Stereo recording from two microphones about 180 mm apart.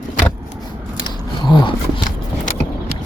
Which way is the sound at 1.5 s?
25° left (ahead or behind).